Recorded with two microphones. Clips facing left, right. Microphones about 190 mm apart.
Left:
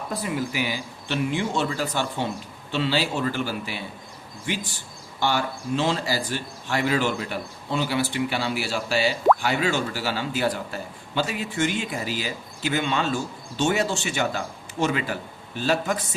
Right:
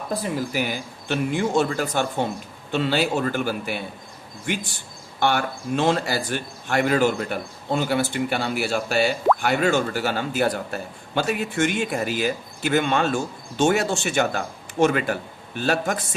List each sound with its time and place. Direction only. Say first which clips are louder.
0.3 s speech: right 2 dB; 45° right (ahead or behind)